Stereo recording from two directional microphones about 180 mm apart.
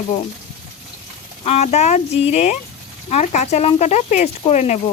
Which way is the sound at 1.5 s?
35° left (ahead or behind).